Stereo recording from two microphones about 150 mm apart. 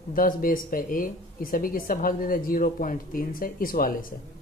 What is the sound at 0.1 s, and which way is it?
Speech, 70° left (ahead or behind).